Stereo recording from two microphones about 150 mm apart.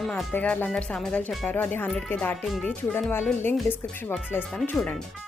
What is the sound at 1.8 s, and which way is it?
Speech, centre (ahead or behind).